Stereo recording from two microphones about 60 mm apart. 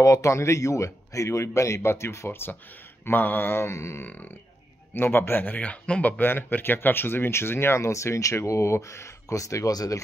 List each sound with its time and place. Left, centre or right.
0.0 s speech: left
3.1 s mantra: left
4.0 s mantra: left
4.9 s speech: left